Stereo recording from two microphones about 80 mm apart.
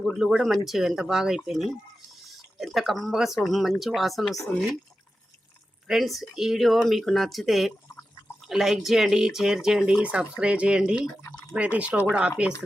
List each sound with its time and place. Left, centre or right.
0.0 s speech: centre
5.9 s speech: centre
10.0 s speech: centre